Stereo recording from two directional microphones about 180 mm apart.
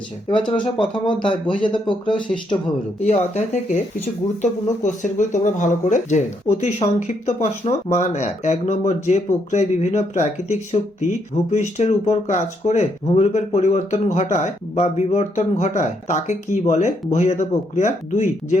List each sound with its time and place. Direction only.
0.3 s speech: 30° left (ahead or behind)
3.0 s speech: 40° left (ahead or behind)